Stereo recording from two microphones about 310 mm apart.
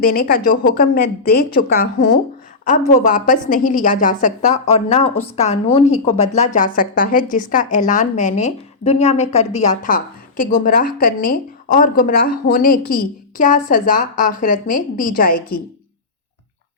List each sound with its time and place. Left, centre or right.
0.0 s a woman's voice: left